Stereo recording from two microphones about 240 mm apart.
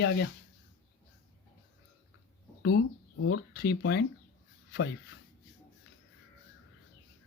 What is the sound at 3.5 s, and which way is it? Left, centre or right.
Speech, left.